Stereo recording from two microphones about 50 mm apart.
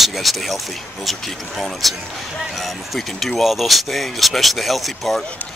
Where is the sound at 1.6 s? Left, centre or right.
Centre.